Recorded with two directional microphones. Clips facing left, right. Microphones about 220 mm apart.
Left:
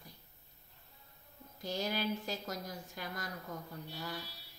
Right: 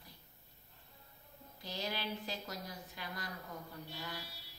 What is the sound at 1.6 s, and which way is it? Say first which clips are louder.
A woman's voice: left 5 dB; 45° left (ahead or behind).